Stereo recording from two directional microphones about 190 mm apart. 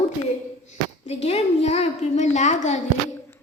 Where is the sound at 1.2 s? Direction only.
35° left (ahead or behind).